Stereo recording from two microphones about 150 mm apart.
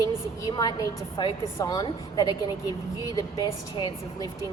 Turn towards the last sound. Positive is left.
turn(degrees=30)  # may be behind; listen again after turning